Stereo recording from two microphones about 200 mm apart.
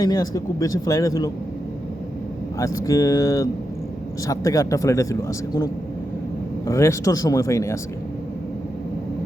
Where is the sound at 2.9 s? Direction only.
15° left (ahead or behind).